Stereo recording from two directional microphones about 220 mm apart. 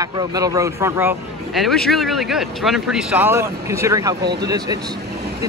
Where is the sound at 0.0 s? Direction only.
15° right (ahead or behind).